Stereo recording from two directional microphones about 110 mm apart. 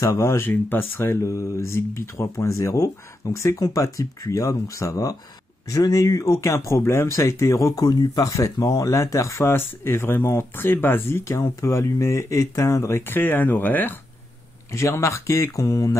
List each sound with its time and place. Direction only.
0.0 s speech: 30° left (ahead or behind)